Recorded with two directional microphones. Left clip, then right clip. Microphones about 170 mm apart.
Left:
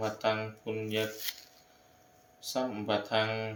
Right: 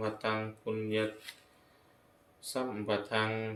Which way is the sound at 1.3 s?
70° left (ahead or behind).